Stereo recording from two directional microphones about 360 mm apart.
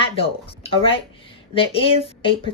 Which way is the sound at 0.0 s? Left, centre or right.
Centre.